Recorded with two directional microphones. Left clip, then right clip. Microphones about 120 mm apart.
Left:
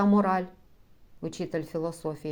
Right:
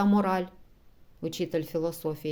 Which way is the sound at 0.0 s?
30° right (ahead or behind).